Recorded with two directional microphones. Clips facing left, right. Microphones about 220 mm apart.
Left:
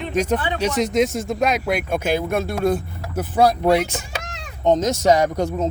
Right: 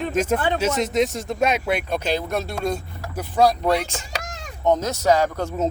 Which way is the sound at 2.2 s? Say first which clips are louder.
Left 4 dB; 10° left (ahead or behind).